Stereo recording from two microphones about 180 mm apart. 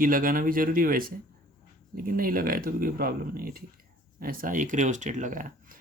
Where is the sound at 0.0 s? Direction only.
50° right (ahead or behind).